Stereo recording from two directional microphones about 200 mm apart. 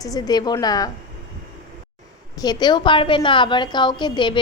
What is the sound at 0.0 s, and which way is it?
Speech, 20° left (ahead or behind).